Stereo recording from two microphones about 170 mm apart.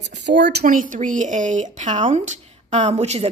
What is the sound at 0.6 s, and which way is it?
Speech, 50° right (ahead or behind).